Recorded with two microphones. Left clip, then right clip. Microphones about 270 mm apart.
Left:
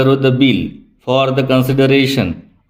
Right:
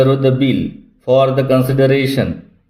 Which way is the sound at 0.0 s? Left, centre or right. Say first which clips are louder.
Left 1 dB; left.